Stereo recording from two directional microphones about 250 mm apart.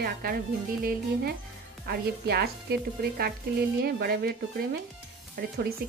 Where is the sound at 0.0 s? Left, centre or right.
Right.